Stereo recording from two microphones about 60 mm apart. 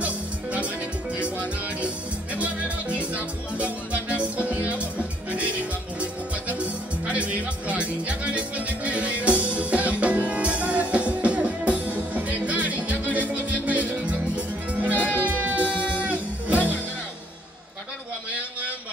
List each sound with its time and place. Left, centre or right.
0.0 s music: right
2.3 s music: right
15.6 s music: left
16.0 s music: right